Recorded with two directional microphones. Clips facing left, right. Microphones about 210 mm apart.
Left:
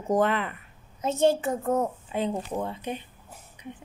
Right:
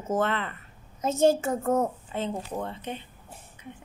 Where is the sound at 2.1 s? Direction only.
10° left (ahead or behind).